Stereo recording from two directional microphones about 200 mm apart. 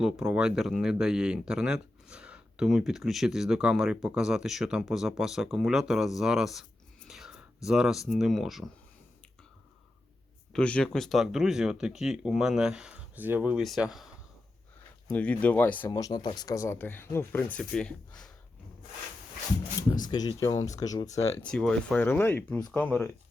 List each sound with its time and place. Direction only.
0.0 s speech: 5° right (ahead or behind)
10.5 s speech: 5° left (ahead or behind)
15.1 s speech: 5° left (ahead or behind)
15.9 s speech: 20° left (ahead or behind); by 18.3 s 5° left (ahead or behind)
19.9 s speech: 20° left (ahead or behind)
21.5 s speech: 5° left (ahead or behind)